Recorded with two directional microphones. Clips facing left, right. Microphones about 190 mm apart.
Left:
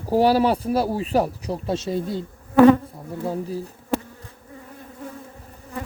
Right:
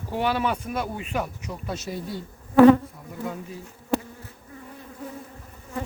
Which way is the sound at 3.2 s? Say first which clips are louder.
Left 7 dB; 35° left (ahead or behind).